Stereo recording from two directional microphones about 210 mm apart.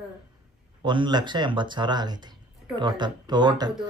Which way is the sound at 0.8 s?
20° right (ahead or behind).